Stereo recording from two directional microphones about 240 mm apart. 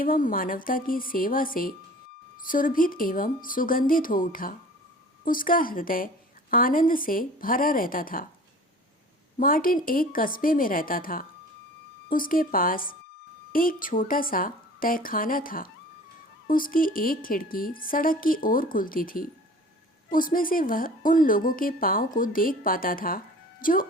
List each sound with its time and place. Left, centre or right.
0.0 s a woman's voice: left
9.4 s a woman's voice: left